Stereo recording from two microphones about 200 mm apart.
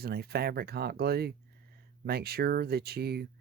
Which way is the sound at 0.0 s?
50° right (ahead or behind).